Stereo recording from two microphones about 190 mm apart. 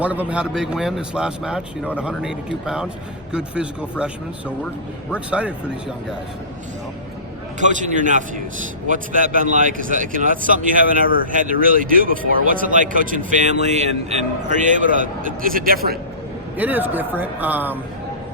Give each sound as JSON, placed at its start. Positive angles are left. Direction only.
{"t": 0.0, "sound": "a man's voice", "side_deg": -10}
{"t": 7.6, "sound": "a man's voice", "side_deg": -40}
{"t": 16.6, "sound": "speech", "side_deg": -10}